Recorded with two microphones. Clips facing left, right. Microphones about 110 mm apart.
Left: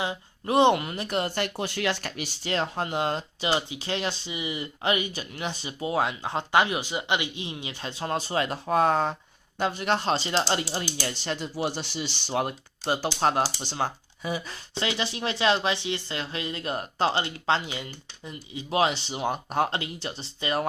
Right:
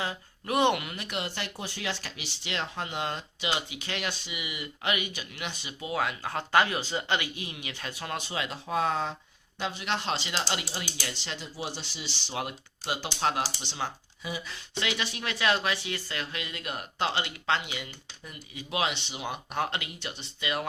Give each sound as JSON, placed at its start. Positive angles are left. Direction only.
{"t": 0.0, "sound": "speech", "side_deg": 25}
{"t": 1.5, "sound": "speech", "side_deg": 70}
{"t": 11.5, "sound": "speech", "side_deg": 60}